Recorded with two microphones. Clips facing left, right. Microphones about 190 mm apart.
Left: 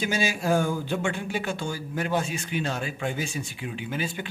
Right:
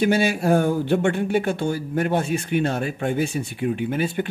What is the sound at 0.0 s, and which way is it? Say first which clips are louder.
Speech: right 7 dB; 60° right (ahead or behind).